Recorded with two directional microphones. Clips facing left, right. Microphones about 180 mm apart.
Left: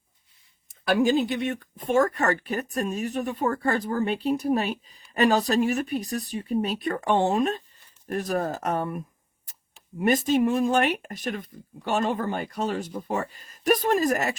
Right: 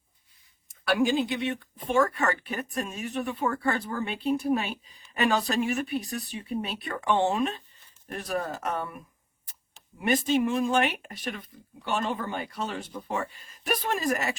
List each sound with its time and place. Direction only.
0.9 s speech: 45° left (ahead or behind)
10.0 s speech: 40° left (ahead or behind)